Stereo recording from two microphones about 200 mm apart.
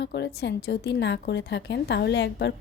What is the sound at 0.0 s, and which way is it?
A woman's voice, 55° left (ahead or behind).